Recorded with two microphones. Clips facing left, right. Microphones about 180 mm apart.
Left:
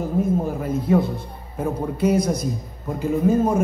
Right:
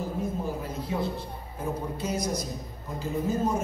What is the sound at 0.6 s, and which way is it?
A man's voice, 55° left (ahead or behind).